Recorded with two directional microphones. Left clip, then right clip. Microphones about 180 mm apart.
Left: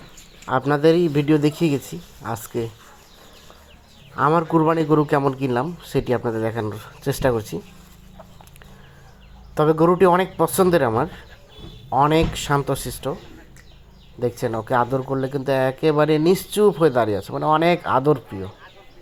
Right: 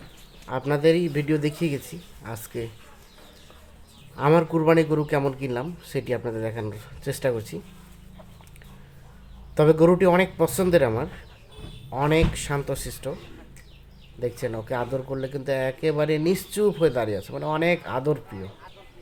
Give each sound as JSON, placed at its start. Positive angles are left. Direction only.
{"t": 0.4, "sound": "speech", "side_deg": 15}
{"t": 4.1, "sound": "speech", "side_deg": 15}
{"t": 9.6, "sound": "speech", "side_deg": 20}
{"t": 14.2, "sound": "speech", "side_deg": 20}